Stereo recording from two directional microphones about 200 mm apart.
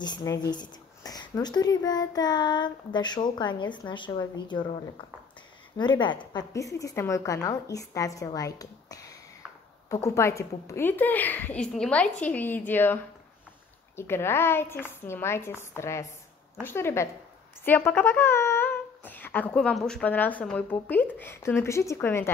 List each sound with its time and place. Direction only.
0.0 s speech: 20° left (ahead or behind)
5.8 s speech: 20° left (ahead or behind)